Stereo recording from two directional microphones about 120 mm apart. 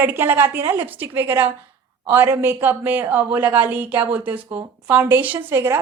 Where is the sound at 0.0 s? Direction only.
15° right (ahead or behind).